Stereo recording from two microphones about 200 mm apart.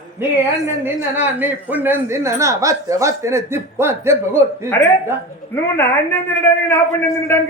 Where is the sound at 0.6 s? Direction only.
10° right (ahead or behind).